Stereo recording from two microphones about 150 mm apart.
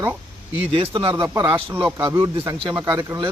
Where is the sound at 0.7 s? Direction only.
35° right (ahead or behind).